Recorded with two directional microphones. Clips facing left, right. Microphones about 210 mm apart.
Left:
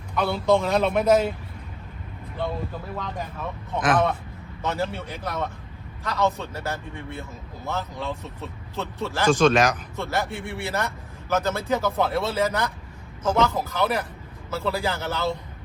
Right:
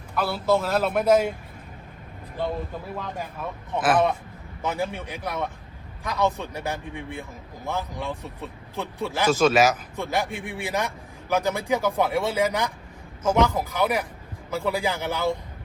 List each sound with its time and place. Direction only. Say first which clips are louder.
0.2 s a man's voice: left 2 dB; 5° right (ahead or behind)
2.9 s a man's voice: even; 10° right (ahead or behind)